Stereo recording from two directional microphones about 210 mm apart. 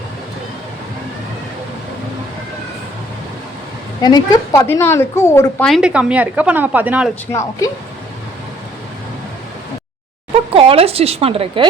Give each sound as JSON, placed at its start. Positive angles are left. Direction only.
{"t": 4.0, "sound": "a woman's voice", "side_deg": 15}
{"t": 10.5, "sound": "a woman's voice", "side_deg": -25}